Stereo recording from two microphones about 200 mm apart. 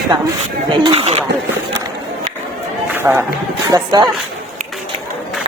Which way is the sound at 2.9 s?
10° right (ahead or behind).